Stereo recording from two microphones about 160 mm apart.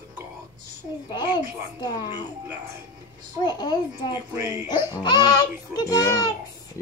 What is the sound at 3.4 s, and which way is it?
Speech, 25° left (ahead or behind).